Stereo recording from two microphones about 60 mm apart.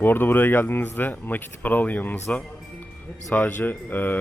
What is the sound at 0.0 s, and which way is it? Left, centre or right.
Speech, left.